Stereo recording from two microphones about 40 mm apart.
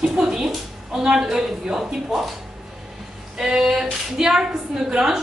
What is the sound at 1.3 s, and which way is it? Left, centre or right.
Speech, centre.